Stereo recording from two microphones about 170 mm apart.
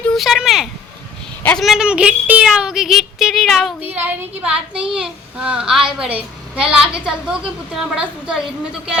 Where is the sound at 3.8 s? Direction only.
10° right (ahead or behind).